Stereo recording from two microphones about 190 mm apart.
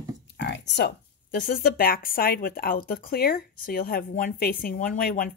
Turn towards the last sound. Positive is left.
turn(degrees=50)  # may be behind; listen again after turning